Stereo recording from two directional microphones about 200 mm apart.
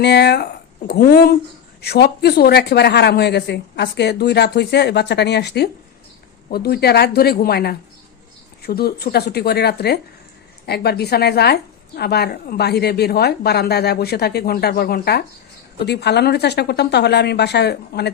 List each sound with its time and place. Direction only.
0.0 s a woman's voice: 55° left (ahead or behind)